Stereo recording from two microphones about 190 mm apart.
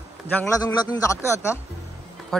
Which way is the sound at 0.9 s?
15° left (ahead or behind).